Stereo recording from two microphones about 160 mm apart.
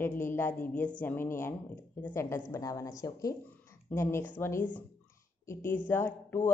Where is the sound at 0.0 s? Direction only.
15° left (ahead or behind).